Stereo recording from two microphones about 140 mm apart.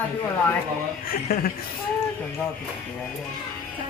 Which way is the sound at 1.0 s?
90° left.